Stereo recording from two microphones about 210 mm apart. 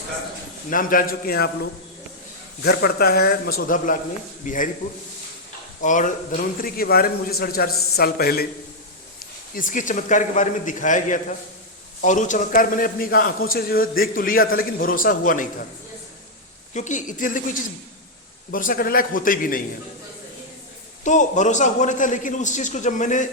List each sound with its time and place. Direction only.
0.7 s a man's voice: 40° left (ahead or behind)
2.6 s a man's voice: 45° left (ahead or behind)
5.8 s a man's voice: 35° left (ahead or behind)
9.6 s a man's voice: 40° left (ahead or behind)
16.7 s a man's voice: 35° left (ahead or behind)
21.0 s a man's voice: 35° left (ahead or behind)